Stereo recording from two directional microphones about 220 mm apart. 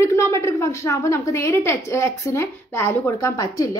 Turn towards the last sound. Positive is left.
turn(degrees=15)  # may be behind; listen again after turning